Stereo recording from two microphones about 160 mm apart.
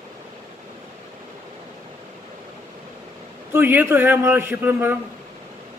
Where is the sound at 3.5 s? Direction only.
10° right (ahead or behind).